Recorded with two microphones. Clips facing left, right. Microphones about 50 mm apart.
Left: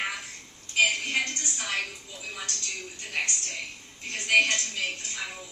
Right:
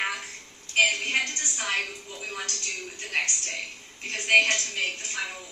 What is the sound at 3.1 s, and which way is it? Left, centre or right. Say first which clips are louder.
A woman's voice: right 2 dB; right.